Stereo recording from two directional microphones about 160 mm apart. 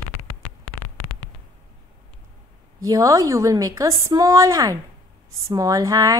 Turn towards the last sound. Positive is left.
turn(degrees=-20)  # may be behind; listen again after turning